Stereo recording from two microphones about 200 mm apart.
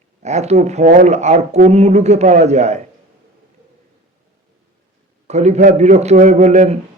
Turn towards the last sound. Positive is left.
turn(degrees=-35)  # may be behind; listen again after turning